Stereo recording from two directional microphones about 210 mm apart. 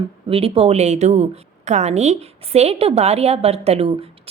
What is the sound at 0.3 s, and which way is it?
A woman's voice, 25° right (ahead or behind).